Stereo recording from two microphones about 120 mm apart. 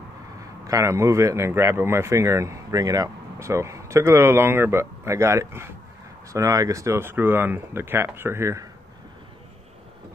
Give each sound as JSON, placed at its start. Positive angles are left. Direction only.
{"t": 0.7, "sound": "speech", "side_deg": -25}